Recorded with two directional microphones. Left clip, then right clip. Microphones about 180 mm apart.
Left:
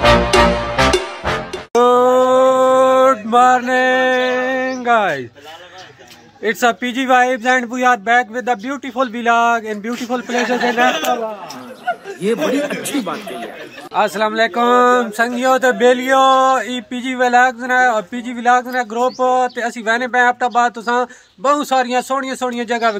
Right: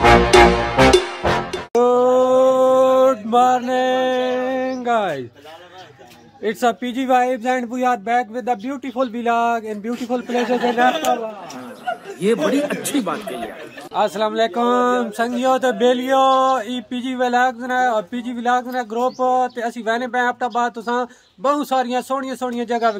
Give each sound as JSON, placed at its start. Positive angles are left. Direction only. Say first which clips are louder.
{"t": 0.0, "sound": "music", "louder": "right 1 dB", "side_deg": 0}
{"t": 6.4, "sound": "speech", "louder": "left 4 dB", "side_deg": 5}
{"t": 12.2, "sound": "speech", "louder": "even", "side_deg": 0}
{"t": 13.9, "sound": "speech", "louder": "left 3 dB", "side_deg": 15}